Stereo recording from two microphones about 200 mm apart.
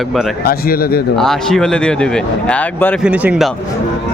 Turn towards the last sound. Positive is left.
turn(degrees=-5)  # may be behind; listen again after turning